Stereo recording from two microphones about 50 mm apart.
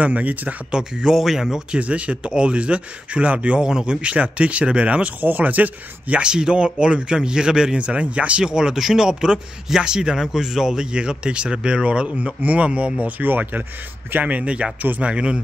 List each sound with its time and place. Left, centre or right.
0.0 s speech: right
0.7 s speech: centre
1.1 s speech: centre
1.8 s speech: right
5.2 s speech: right
6.2 s speech: centre
13.2 s speech: right